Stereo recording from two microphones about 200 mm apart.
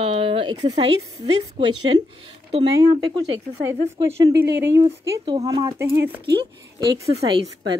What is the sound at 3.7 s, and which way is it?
Speech, 15° right (ahead or behind).